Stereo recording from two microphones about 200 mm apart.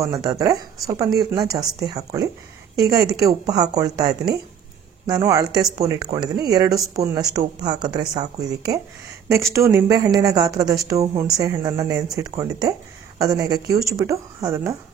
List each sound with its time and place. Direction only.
0.0 s a woman's voice: 20° right (ahead or behind)